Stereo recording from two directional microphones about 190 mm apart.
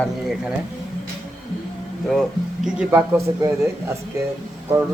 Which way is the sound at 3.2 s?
15° right (ahead or behind).